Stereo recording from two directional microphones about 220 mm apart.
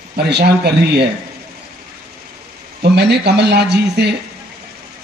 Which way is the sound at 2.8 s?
50° right (ahead or behind).